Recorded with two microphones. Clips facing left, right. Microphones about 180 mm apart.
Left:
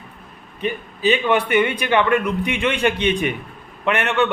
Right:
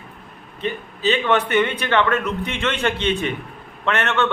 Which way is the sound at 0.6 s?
15° left (ahead or behind).